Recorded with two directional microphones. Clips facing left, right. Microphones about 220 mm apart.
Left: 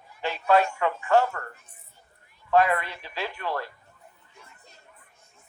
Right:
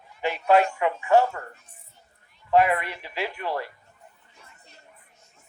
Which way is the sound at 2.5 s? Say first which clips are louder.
Right 1 dB; 15° right (ahead or behind).